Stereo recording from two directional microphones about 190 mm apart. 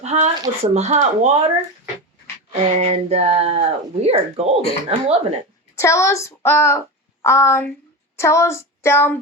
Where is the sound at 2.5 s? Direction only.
35° right (ahead or behind).